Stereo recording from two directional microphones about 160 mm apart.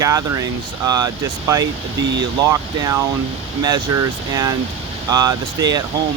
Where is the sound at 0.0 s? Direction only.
20° right (ahead or behind).